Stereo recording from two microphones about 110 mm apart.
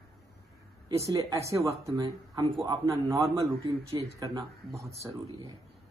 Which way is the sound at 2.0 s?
40° right (ahead or behind).